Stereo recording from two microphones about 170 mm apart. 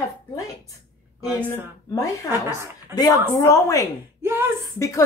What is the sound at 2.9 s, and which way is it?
Speech, 20° left (ahead or behind).